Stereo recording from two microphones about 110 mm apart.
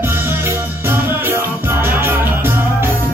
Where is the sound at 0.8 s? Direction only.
20° right (ahead or behind).